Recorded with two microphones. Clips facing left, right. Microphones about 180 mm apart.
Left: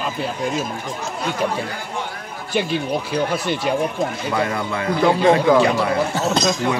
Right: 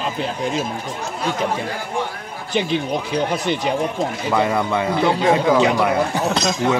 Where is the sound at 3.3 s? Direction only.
20° right (ahead or behind).